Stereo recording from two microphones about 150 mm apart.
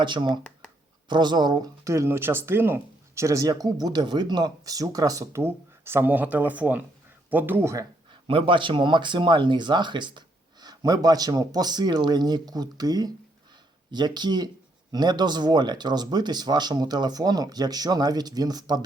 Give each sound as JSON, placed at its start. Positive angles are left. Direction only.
{"t": 0.0, "sound": "speech", "side_deg": -30}
{"t": 8.1, "sound": "speech", "side_deg": -35}